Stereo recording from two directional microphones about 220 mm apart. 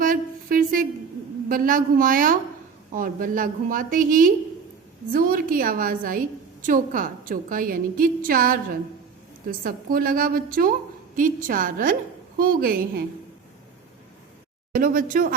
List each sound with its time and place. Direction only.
0.0 s a sound: 40° right (ahead or behind)
1.5 s a woman's voice: 40° right (ahead or behind)
14.7 s a woman's voice: 40° right (ahead or behind)